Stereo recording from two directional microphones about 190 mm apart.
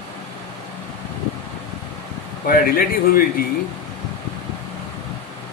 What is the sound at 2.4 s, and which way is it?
Speech, 50° left (ahead or behind).